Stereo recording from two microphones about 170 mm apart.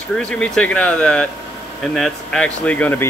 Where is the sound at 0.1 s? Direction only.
5° left (ahead or behind).